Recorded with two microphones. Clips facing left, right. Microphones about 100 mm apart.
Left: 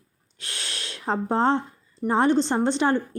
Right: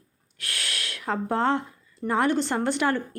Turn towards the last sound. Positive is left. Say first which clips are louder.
# left 2 dB
turn(degrees=25)  # may be behind; listen again after turning